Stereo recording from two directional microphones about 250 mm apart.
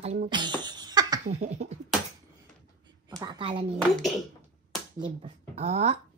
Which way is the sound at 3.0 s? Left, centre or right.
Centre.